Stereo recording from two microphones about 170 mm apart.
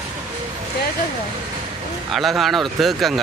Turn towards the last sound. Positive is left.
turn(degrees=0)  # may be behind; listen again after turning